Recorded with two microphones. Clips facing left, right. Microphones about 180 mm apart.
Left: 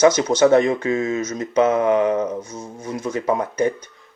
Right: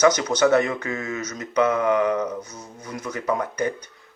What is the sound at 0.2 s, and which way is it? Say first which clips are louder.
Speech: left 4 dB; 25° left (ahead or behind).